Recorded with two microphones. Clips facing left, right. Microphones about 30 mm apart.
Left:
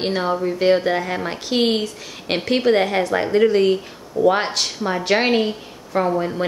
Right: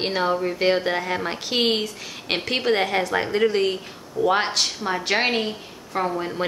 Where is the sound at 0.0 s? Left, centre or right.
Centre.